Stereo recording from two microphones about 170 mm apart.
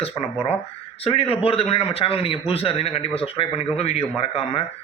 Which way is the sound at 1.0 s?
35° left (ahead or behind).